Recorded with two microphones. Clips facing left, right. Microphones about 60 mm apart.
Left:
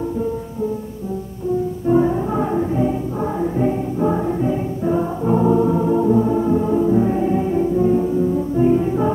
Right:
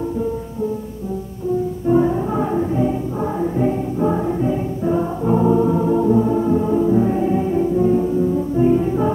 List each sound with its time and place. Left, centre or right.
2.0 s music: centre